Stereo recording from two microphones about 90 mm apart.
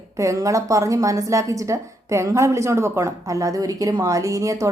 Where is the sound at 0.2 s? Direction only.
35° right (ahead or behind).